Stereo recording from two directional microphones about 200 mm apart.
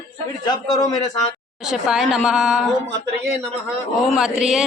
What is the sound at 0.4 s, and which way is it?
Speech, 20° left (ahead or behind).